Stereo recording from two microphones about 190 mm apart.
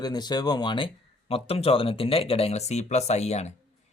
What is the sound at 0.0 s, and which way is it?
A man's voice, 20° left (ahead or behind).